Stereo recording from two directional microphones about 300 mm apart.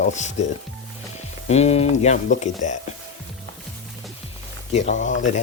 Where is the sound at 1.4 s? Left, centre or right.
Left.